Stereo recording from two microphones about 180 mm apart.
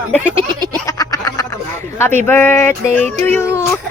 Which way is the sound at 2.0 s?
10° left (ahead or behind).